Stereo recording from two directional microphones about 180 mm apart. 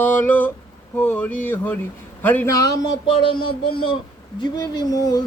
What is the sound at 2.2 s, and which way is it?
Speech, 10° left (ahead or behind).